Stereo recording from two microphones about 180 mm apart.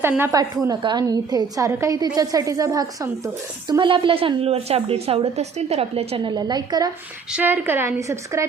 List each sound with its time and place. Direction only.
0.0 s a woman's voice: 15° right (ahead or behind)
7.3 s a woman's voice: 10° right (ahead or behind)